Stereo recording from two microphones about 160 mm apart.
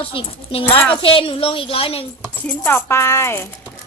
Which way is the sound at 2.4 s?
15° left (ahead or behind).